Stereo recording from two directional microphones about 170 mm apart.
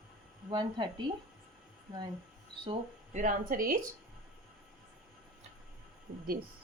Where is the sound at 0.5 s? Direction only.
25° right (ahead or behind).